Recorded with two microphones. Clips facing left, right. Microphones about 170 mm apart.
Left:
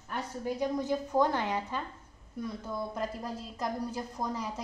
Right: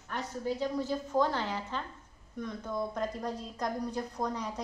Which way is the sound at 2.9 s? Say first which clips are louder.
Right 1 dB; 5° left (ahead or behind).